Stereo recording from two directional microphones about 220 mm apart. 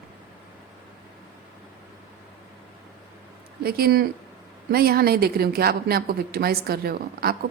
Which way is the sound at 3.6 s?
45° right (ahead or behind).